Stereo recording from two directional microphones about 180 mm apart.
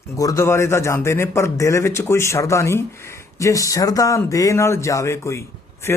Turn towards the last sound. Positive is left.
turn(degrees=15)  # may be behind; listen again after turning